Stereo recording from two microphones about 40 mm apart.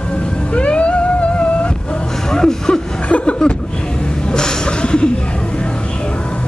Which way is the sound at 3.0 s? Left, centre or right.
Left.